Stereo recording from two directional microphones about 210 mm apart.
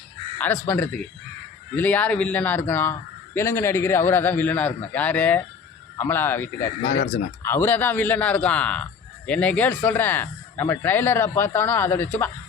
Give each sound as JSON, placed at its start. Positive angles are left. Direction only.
{"t": 0.3, "sound": "a man's voice", "side_deg": 10}
{"t": 6.8, "sound": "speech", "side_deg": 50}
{"t": 7.4, "sound": "a man's voice", "side_deg": 10}